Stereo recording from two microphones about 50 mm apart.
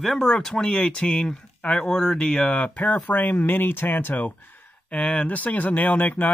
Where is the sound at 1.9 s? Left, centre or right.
Centre.